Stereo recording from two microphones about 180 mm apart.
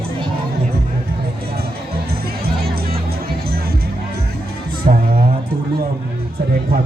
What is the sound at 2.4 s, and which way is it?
Music, 60° right (ahead or behind).